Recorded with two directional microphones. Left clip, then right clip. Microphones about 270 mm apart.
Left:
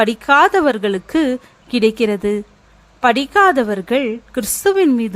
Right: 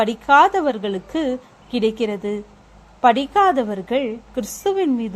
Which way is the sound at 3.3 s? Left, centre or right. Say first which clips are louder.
Left 4 dB; left.